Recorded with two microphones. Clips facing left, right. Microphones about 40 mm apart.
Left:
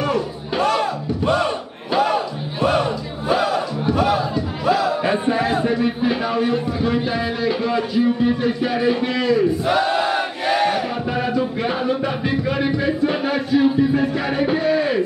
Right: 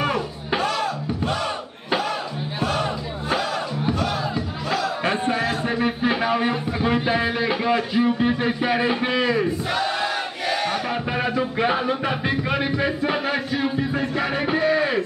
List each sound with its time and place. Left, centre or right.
0.0 s a sound: centre
0.7 s battle cry: centre
2.0 s crowd: centre
3.3 s battle cry: centre
3.9 s music: centre
5.8 s music: right
9.7 s a sound: centre
11.1 s music: centre